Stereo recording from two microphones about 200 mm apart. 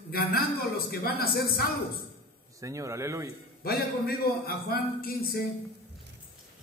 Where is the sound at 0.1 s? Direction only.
50° left (ahead or behind).